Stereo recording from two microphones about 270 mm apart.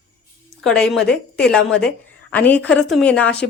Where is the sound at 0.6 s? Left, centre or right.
Centre.